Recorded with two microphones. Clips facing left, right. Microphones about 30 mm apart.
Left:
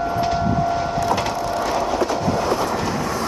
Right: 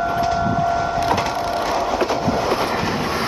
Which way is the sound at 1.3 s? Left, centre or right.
Right.